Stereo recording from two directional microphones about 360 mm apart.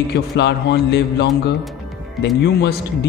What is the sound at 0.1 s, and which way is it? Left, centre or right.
A man's voice, left.